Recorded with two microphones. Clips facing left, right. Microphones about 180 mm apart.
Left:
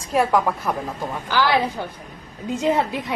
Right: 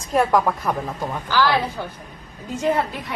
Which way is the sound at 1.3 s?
15° left (ahead or behind).